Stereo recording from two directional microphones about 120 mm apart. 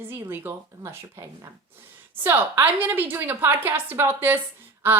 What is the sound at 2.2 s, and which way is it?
A woman's voice, 15° right (ahead or behind).